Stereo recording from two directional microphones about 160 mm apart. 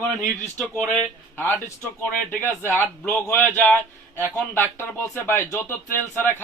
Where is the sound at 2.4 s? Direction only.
15° left (ahead or behind).